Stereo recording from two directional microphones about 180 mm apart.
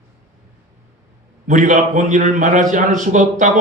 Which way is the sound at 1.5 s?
45° right (ahead or behind).